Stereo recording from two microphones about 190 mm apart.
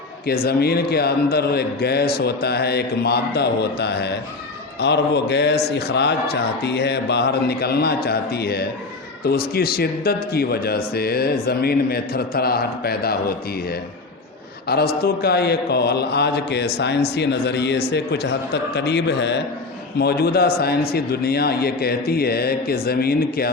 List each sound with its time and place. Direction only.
0.3 s speech: 55° left (ahead or behind)